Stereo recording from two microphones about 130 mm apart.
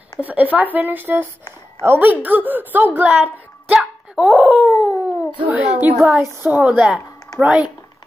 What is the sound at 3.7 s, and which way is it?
Dog, 10° right (ahead or behind).